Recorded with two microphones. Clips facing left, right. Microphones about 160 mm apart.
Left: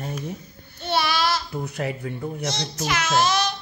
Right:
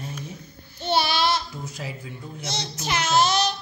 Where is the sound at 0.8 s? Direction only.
25° right (ahead or behind).